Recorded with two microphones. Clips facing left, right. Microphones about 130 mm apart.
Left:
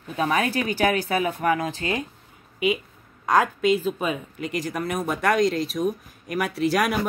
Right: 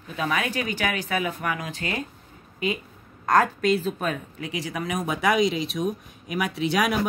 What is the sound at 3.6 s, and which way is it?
Speech, 5° left (ahead or behind).